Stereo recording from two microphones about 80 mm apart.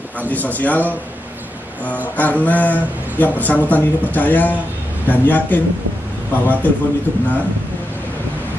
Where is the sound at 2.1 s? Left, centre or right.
Left.